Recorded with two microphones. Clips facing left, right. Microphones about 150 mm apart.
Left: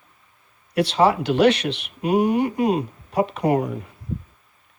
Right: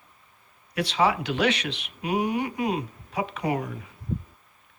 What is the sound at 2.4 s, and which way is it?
Speech, 45° left (ahead or behind).